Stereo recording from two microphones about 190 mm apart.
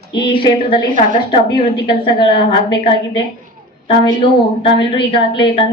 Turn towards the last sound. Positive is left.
turn(degrees=25)  # may be behind; listen again after turning